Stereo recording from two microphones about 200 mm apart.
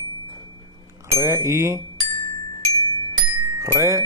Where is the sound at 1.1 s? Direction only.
15° right (ahead or behind).